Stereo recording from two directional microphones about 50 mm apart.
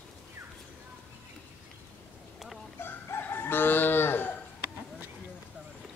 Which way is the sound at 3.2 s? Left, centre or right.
Left.